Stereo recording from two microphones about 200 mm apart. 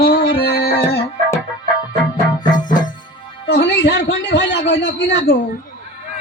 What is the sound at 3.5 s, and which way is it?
A man's voice, 60° left (ahead or behind).